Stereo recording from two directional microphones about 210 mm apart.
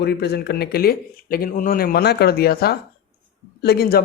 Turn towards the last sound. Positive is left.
turn(degrees=50)  # may be behind; listen again after turning